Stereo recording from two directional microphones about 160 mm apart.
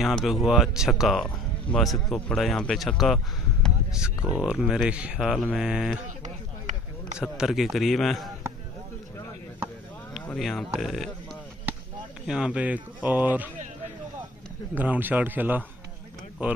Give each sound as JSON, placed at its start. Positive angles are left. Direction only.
{"t": 0.0, "sound": "speech", "side_deg": 0}
{"t": 3.6, "sound": "a sound", "side_deg": -5}
{"t": 4.3, "sound": "speech", "side_deg": -5}
{"t": 6.0, "sound": "a sound", "side_deg": -50}
{"t": 7.2, "sound": "speech", "side_deg": -5}
{"t": 10.2, "sound": "speech", "side_deg": 5}
{"t": 12.3, "sound": "speech", "side_deg": -5}
{"t": 14.8, "sound": "speech", "side_deg": -10}